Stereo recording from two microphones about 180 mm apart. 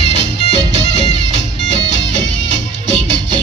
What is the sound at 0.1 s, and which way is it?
Music, 75° left (ahead or behind).